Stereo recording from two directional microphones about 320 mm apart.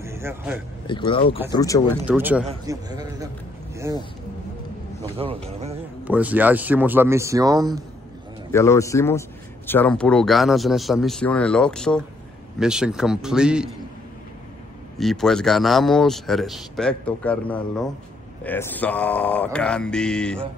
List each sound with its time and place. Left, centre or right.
0.0 s speech: centre
0.8 s a man's voice: centre
2.0 s a man's voice: centre
5.1 s a man's voice: centre
6.0 s speech: centre
8.5 s a man's voice: centre
15.0 s speech: centre